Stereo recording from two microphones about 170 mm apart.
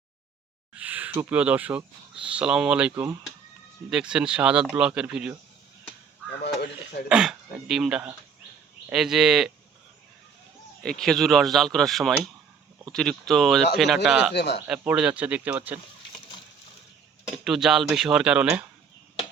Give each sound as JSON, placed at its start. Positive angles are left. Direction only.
{"t": 0.7, "sound": "a sound", "side_deg": -10}
{"t": 2.3, "sound": "speech", "side_deg": -5}
{"t": 6.4, "sound": "a sound", "side_deg": 70}
{"t": 7.1, "sound": "speech", "side_deg": -5}
{"t": 10.8, "sound": "speech", "side_deg": 5}
{"t": 14.3, "sound": "speech", "side_deg": 80}
{"t": 14.7, "sound": "speech", "side_deg": -5}
{"t": 17.3, "sound": "speech", "side_deg": 0}